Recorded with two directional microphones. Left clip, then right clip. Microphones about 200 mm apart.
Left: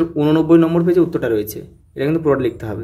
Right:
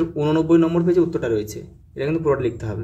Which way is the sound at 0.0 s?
20° left (ahead or behind).